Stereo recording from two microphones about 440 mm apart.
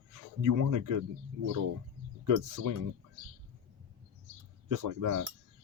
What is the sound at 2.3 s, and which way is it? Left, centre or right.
Speech, right.